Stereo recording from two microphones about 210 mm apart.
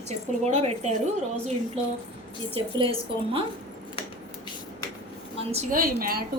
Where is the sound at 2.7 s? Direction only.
25° right (ahead or behind).